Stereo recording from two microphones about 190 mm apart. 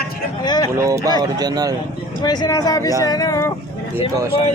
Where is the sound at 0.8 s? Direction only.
15° right (ahead or behind).